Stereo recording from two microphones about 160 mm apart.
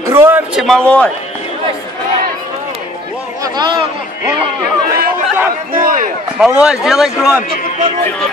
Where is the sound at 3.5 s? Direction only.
30° right (ahead or behind).